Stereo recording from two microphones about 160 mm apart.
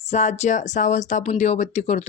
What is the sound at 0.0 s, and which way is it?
Speech, 45° left (ahead or behind).